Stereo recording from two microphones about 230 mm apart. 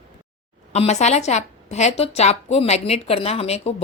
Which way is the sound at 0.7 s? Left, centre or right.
Left.